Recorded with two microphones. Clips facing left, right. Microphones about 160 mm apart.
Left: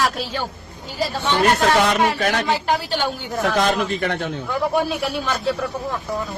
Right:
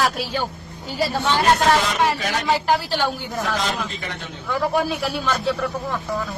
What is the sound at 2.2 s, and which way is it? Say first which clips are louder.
Speech: left 4 dB; 55° left (ahead or behind).